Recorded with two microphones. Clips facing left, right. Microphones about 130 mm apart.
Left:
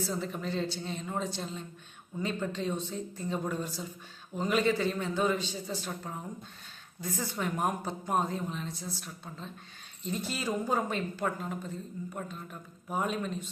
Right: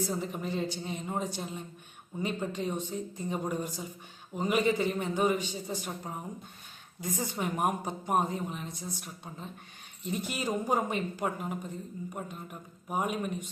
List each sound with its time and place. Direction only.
0.0 s speech: 15° right (ahead or behind)